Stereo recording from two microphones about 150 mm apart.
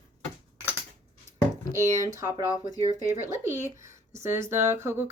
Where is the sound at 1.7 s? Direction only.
20° right (ahead or behind).